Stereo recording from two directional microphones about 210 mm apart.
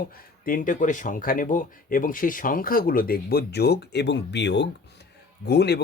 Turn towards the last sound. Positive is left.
turn(degrees=50)  # may be behind; listen again after turning